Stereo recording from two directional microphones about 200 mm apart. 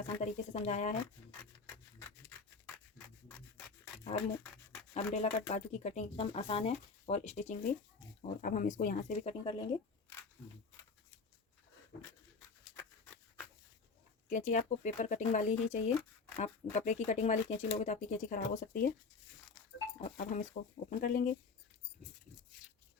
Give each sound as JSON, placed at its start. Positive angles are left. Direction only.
{"t": 0.0, "sound": "speech", "side_deg": 35}
{"t": 4.1, "sound": "speech", "side_deg": 35}
{"t": 9.4, "sound": "speech", "side_deg": 25}
{"t": 14.3, "sound": "speech", "side_deg": 35}
{"t": 20.1, "sound": "speech", "side_deg": 40}